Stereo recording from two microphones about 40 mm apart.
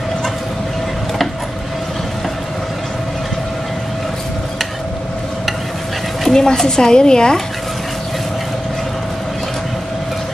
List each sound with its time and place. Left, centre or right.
6.2 s a woman's voice: centre